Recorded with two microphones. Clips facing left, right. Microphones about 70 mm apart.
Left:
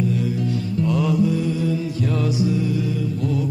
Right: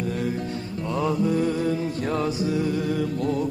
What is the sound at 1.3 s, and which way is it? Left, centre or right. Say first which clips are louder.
Music: left 1 dB; right.